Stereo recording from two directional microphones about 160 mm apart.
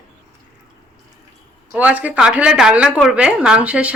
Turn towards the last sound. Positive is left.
turn(degrees=-5)  # may be behind; listen again after turning